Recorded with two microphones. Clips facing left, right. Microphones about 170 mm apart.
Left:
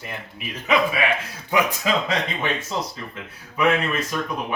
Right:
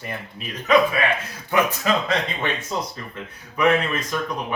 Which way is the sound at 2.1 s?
5° left (ahead or behind).